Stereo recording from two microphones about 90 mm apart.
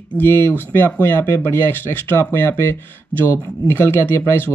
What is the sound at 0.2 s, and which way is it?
Speech, 25° left (ahead or behind).